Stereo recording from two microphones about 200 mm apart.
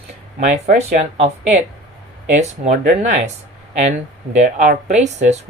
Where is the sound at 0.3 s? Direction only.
30° right (ahead or behind).